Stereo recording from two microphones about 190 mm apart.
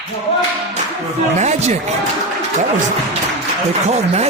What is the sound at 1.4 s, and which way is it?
Speech, 35° right (ahead or behind).